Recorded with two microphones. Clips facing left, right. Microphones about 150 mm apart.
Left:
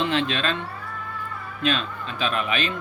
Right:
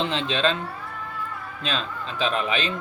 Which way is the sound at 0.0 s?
25° right (ahead or behind).